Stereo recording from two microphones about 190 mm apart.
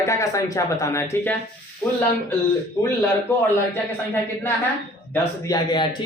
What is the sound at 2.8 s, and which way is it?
A man's voice, 15° left (ahead or behind).